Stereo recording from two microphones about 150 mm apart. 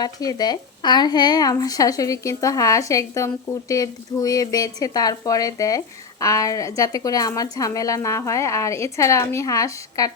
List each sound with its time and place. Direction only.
0.0 s a woman's voice: 25° left (ahead or behind)